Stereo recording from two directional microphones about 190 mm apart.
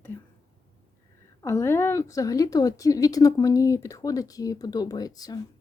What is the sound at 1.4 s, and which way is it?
A woman's voice, 15° left (ahead or behind).